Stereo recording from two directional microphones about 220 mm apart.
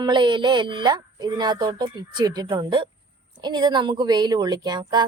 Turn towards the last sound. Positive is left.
turn(degrees=-20)  # may be behind; listen again after turning